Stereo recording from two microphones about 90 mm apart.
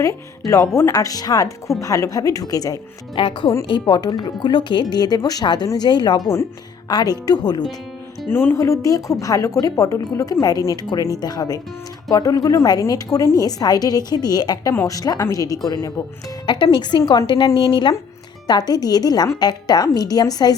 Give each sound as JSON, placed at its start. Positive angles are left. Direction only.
{"t": 0.0, "sound": "speech", "side_deg": 35}
{"t": 3.2, "sound": "speech", "side_deg": 80}
{"t": 3.7, "sound": "speech", "side_deg": 60}
{"t": 8.3, "sound": "speech", "side_deg": 20}
{"t": 8.5, "sound": "speech", "side_deg": 35}
{"t": 16.5, "sound": "a woman's voice", "side_deg": 55}